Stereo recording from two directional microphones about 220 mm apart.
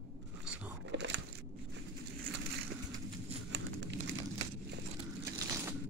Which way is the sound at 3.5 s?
55° right (ahead or behind).